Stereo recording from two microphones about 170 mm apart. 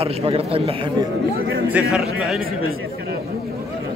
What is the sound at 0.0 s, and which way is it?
Speech, 35° right (ahead or behind).